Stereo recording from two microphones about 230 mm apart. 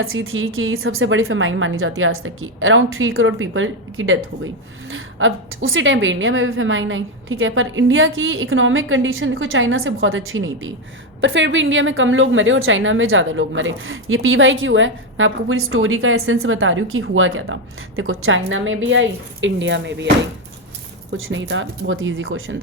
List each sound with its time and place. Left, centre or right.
0.0 s a woman's voice: right
21.2 s a woman's voice: right